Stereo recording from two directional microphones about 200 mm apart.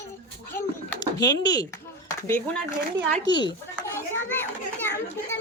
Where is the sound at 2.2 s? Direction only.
10° left (ahead or behind).